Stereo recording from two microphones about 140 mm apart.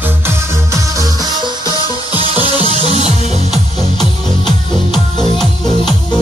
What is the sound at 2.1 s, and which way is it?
Music, 30° left (ahead or behind).